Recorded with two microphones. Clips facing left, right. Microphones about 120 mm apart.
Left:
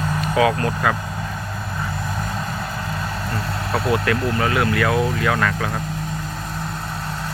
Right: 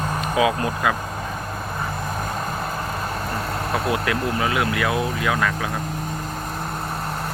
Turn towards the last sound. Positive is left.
turn(degrees=-10)  # may be behind; listen again after turning